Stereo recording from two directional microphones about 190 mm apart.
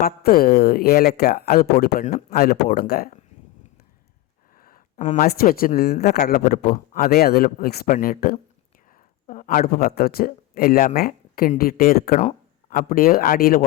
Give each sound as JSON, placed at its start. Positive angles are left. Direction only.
{"t": 0.0, "sound": "speech", "side_deg": 50}
{"t": 4.6, "sound": "speech", "side_deg": 45}
{"t": 6.7, "sound": "speech", "side_deg": 45}